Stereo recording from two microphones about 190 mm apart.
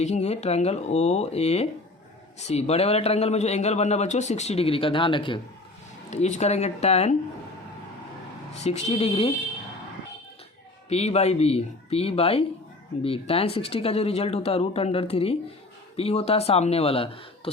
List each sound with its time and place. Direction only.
0.0 s a man's voice: 35° left (ahead or behind)
6.1 s a man's voice: 35° left (ahead or behind)
8.6 s a man's voice: 35° left (ahead or behind)
10.8 s a man's voice: 35° left (ahead or behind)